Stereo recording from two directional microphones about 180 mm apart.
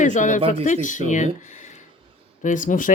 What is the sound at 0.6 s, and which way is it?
Speech, 45° left (ahead or behind).